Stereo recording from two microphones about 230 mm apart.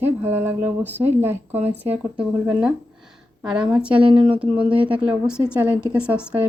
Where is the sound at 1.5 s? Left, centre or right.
Right.